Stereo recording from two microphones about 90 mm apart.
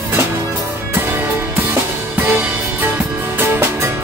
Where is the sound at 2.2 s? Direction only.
25° right (ahead or behind).